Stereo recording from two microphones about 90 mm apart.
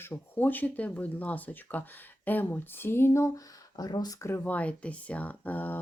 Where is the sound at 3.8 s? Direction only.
45° left (ahead or behind).